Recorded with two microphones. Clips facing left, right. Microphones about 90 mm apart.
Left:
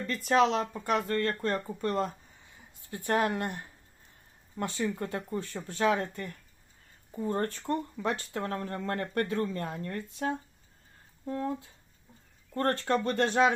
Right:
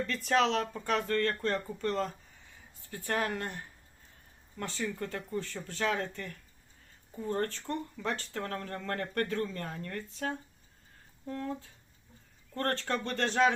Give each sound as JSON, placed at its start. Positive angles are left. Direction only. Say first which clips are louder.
{"t": 0.1, "sound": "speech", "louder": "left 4 dB", "side_deg": 5}